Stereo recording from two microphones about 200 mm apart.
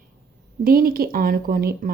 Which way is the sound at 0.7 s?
45° right (ahead or behind).